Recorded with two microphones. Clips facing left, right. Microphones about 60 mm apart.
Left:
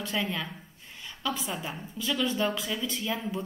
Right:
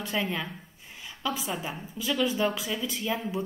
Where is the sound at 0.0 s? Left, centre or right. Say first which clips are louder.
Right 1 dB; centre.